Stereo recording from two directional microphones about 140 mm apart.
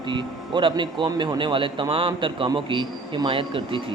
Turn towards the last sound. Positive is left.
turn(degrees=-35)  # may be behind; listen again after turning